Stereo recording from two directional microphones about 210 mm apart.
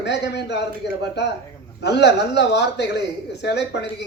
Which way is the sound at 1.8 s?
55° left (ahead or behind).